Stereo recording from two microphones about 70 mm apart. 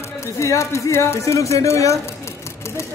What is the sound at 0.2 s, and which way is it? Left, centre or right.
Speech, left.